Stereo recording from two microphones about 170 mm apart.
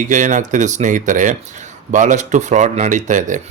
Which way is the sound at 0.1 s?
50° right (ahead or behind).